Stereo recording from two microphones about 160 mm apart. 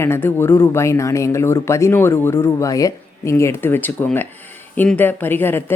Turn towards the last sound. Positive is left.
turn(degrees=15)  # may be behind; listen again after turning